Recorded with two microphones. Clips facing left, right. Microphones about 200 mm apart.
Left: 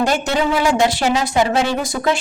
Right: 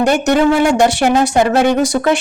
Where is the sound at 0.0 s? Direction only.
60° right (ahead or behind).